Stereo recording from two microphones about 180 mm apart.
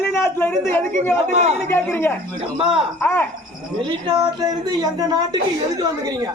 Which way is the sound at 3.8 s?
25° right (ahead or behind).